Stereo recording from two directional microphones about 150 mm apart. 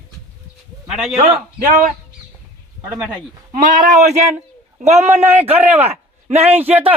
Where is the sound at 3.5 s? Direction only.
65° right (ahead or behind).